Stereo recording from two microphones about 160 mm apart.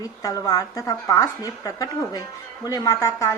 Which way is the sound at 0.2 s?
20° left (ahead or behind).